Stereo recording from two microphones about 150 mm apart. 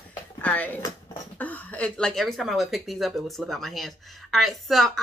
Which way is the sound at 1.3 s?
10° left (ahead or behind).